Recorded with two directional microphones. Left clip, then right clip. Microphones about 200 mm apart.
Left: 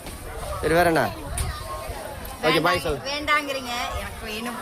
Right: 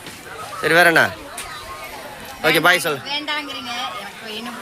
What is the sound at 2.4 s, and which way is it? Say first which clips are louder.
Speech: right 6 dB; centre (ahead or behind).